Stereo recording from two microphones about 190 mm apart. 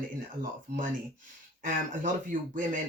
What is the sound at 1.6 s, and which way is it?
Speech, 45° right (ahead or behind).